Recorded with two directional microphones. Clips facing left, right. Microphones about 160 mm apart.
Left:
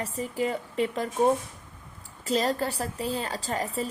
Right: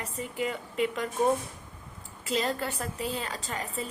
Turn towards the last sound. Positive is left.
turn(degrees=35)  # may be behind; listen again after turning